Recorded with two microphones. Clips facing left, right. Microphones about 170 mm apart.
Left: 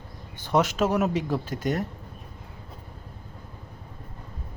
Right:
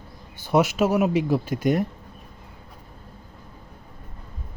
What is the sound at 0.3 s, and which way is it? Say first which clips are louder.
Speech: right 3 dB; 10° right (ahead or behind).